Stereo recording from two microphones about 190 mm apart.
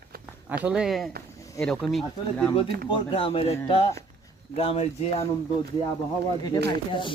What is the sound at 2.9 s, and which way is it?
Speech, 30° left (ahead or behind).